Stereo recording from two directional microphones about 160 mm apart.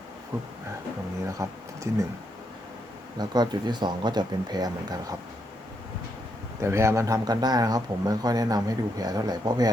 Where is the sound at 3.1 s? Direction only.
25° right (ahead or behind).